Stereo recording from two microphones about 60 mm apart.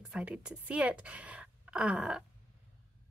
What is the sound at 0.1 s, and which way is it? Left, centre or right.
Speech, centre.